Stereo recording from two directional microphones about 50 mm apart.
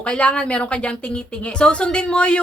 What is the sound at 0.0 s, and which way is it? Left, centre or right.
A woman's voice, left.